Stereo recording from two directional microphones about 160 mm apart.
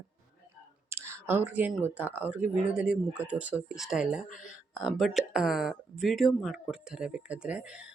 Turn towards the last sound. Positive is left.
turn(degrees=-5)  # may be behind; listen again after turning